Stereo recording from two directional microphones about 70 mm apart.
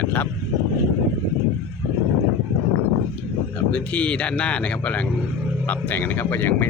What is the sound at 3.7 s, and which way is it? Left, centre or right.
Speech, centre.